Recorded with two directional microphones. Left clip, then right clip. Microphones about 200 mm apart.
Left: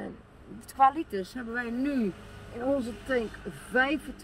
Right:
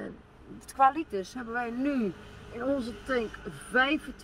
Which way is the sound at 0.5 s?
10° right (ahead or behind).